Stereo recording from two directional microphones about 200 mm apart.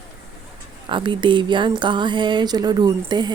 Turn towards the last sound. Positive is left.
turn(degrees=-20)  # may be behind; listen again after turning